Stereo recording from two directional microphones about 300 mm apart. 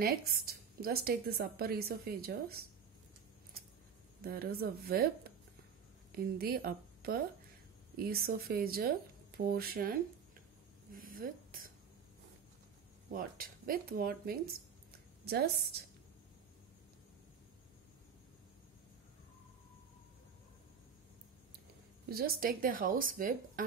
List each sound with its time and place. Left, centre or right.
0.0 s a woman's voice: right
4.2 s a woman's voice: right
10.9 s a sound: right
13.1 s speech: right
22.1 s speech: right